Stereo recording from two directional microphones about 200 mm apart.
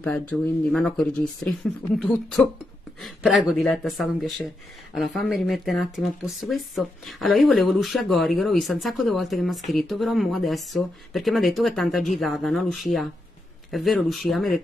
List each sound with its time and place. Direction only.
0.0 s speech: 5° left (ahead or behind)